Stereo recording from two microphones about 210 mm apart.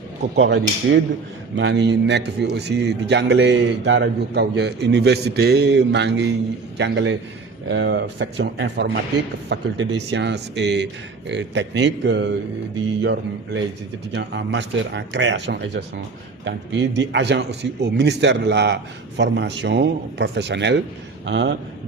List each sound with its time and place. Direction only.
0.3 s a man's voice: 55° right (ahead or behind)